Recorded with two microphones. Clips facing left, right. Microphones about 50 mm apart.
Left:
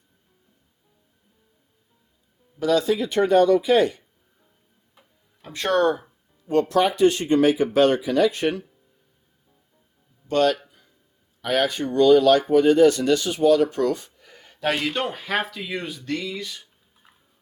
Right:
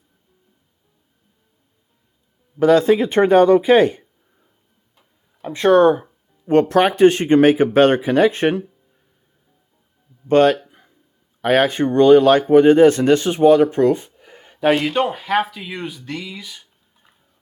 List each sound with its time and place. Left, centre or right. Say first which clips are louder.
2.6 s speech: right 7 dB; right
5.4 s speech: right 8 dB; centre
6.5 s speech: right 5 dB; right
10.2 s speech: right 7 dB; right
10.7 s a sound: right 6 dB; right
11.4 s speech: right 7 dB; right; by 16.6 s centre
17.0 s a sound: left 1 dB; centre